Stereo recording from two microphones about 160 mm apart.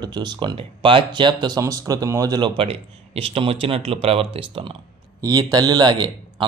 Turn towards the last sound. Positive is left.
turn(degrees=-25)  # may be behind; listen again after turning